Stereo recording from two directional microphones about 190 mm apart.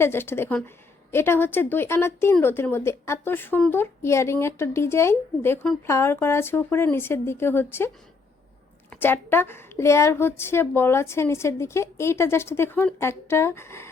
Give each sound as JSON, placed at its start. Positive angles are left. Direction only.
{"t": 0.0, "sound": "speech", "side_deg": 10}
{"t": 8.9, "sound": "speech", "side_deg": 10}